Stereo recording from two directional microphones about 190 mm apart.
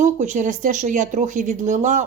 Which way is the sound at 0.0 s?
40° right (ahead or behind).